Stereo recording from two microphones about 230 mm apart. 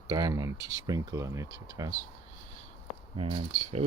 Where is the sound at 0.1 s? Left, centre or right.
Centre.